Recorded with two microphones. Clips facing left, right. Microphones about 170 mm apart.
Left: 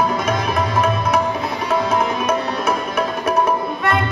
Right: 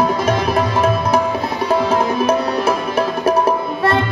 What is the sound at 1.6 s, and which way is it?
Music, 30° right (ahead or behind).